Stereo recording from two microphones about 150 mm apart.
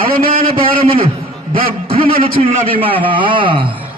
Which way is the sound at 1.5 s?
75° right (ahead or behind).